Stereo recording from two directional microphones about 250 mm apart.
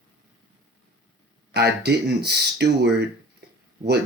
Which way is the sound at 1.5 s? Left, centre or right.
Right.